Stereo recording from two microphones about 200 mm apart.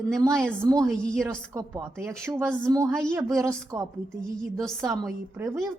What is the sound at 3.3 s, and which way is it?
Speech, 15° right (ahead or behind).